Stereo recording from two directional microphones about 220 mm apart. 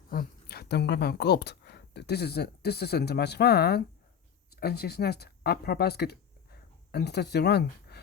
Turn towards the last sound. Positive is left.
turn(degrees=45)  # may be behind; listen again after turning